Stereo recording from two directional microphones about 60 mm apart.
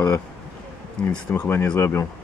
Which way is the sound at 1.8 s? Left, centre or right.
Left.